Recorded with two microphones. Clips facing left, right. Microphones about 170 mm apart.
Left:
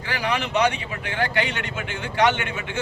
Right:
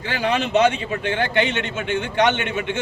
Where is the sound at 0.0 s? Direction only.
25° right (ahead or behind).